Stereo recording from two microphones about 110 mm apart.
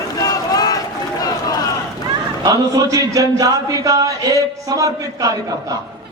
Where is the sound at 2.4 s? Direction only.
35° right (ahead or behind).